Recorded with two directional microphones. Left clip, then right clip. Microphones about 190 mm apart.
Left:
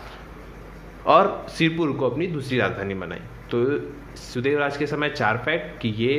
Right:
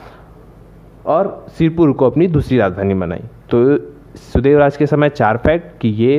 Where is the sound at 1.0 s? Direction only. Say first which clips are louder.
Right 1 dB; 35° right (ahead or behind).